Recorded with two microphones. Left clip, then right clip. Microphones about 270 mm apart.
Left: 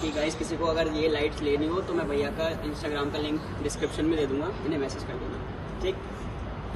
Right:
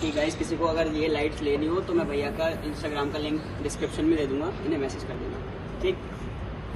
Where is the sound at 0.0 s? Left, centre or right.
Left.